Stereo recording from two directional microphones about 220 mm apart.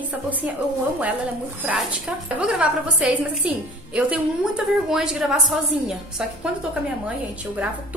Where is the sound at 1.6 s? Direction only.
5° right (ahead or behind).